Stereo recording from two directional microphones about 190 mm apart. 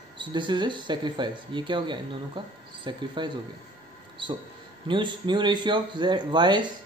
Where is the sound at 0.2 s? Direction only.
25° right (ahead or behind).